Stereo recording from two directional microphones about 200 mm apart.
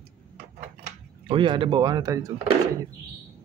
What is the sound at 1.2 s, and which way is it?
Speech, 25° right (ahead or behind).